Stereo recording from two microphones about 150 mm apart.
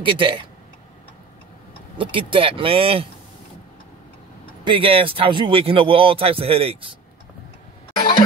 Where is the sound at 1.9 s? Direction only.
35° right (ahead or behind).